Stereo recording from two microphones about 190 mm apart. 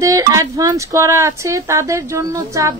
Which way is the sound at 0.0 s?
15° right (ahead or behind).